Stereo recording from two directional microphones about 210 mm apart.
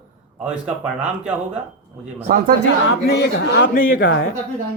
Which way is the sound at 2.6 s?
50° left (ahead or behind).